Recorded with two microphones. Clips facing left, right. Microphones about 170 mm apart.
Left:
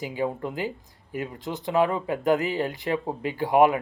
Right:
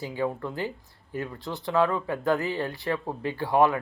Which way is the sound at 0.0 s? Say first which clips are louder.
Left 1 dB; 15° left (ahead or behind).